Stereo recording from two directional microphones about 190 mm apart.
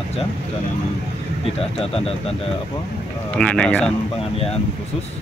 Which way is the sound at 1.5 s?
30° left (ahead or behind).